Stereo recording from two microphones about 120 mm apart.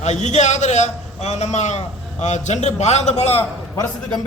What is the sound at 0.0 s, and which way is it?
A man's voice, 75° left (ahead or behind).